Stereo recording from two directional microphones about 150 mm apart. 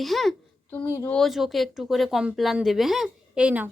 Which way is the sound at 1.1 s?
Centre (ahead or behind).